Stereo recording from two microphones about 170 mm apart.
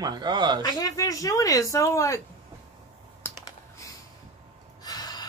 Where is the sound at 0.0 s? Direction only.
25° right (ahead or behind).